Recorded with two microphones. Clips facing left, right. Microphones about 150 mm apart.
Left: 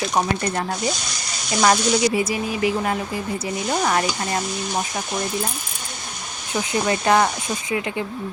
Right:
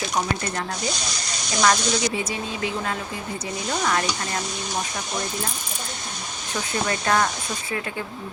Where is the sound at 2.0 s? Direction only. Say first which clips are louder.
Left 6 dB; 10° left (ahead or behind).